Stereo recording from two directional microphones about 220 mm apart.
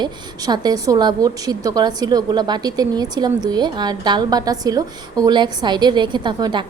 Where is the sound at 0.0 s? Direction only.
20° right (ahead or behind).